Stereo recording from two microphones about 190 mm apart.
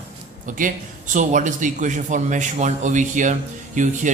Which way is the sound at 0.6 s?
45° right (ahead or behind).